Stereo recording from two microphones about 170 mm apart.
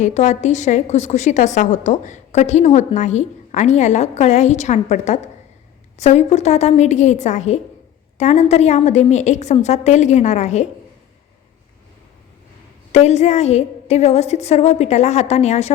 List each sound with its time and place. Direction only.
0.0 s a woman's voice: 45° left (ahead or behind)
12.9 s a woman's voice: 40° left (ahead or behind)